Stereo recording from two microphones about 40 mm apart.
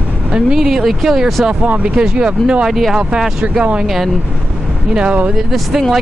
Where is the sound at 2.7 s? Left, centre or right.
Centre.